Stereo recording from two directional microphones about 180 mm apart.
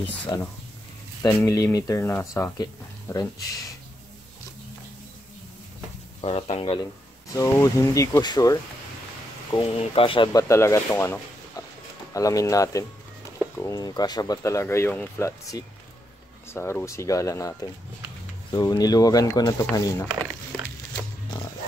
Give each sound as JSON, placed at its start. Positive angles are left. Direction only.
{"t": 1.2, "sound": "speech", "side_deg": 20}
{"t": 6.2, "sound": "speech", "side_deg": 35}
{"t": 7.3, "sound": "speech", "side_deg": 15}
{"t": 10.5, "sound": "speech", "side_deg": 15}